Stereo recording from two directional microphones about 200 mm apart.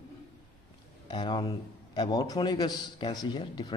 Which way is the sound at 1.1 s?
20° left (ahead or behind).